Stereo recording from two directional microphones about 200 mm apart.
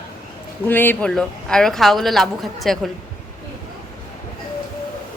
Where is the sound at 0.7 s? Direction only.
10° left (ahead or behind).